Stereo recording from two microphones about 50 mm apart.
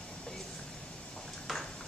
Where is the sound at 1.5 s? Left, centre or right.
Centre.